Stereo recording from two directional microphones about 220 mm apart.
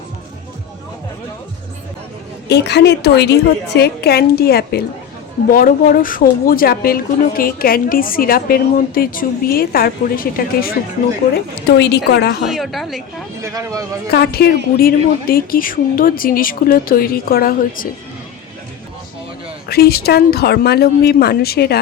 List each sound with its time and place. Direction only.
2.5 s a woman's voice: 50° left (ahead or behind)
11.8 s a woman's voice: 50° left (ahead or behind)
12.5 s a woman's voice: centre (ahead or behind)
13.4 s speech: 15° right (ahead or behind)
14.1 s a woman's voice: 45° left (ahead or behind)
19.6 s a woman's voice: 45° left (ahead or behind)